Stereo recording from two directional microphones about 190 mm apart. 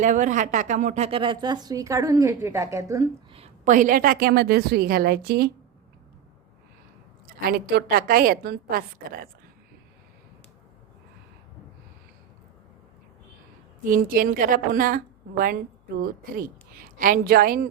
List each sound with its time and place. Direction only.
0.0 s a woman's voice: 40° right (ahead or behind); by 3.0 s 15° right (ahead or behind)
3.3 s a woman's voice: 35° right (ahead or behind); by 5.5 s 55° right (ahead or behind)
7.3 s a woman's voice: 55° right (ahead or behind)
13.8 s a woman's voice: 45° right (ahead or behind)
16.7 s a woman's voice: 45° right (ahead or behind)